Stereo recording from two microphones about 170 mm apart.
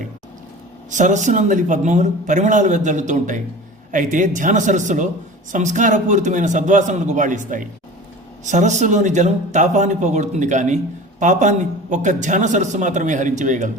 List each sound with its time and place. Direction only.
0.9 s a man's voice: 45° right (ahead or behind)